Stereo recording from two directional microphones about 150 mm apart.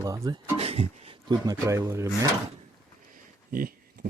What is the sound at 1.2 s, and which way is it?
Speech, 25° right (ahead or behind).